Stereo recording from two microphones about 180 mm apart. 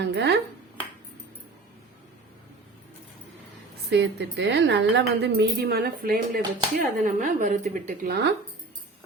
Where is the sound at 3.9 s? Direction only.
70° right (ahead or behind).